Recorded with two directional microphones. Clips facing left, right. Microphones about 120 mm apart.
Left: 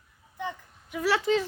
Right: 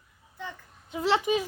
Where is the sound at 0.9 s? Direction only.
25° right (ahead or behind).